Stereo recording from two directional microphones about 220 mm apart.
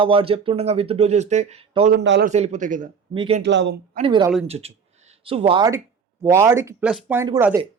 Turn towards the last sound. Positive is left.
turn(degrees=-10)  # may be behind; listen again after turning